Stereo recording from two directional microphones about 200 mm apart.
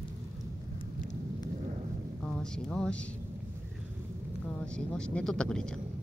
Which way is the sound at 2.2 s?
5° left (ahead or behind).